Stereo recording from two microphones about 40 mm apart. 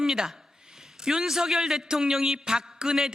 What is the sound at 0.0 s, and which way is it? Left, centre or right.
A man's voice, centre.